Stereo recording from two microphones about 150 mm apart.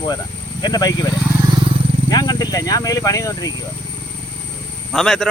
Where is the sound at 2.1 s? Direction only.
25° left (ahead or behind).